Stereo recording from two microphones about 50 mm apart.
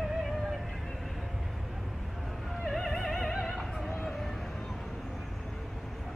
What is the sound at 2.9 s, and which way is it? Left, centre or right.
Opera, centre.